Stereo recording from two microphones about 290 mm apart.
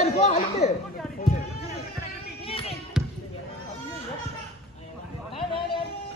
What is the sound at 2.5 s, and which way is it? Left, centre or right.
Basketball bounce, centre.